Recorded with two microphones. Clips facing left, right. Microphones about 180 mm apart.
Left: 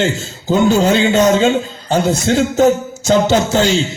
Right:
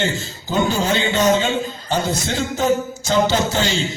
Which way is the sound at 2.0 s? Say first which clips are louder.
Left 8 dB; 55° left (ahead or behind).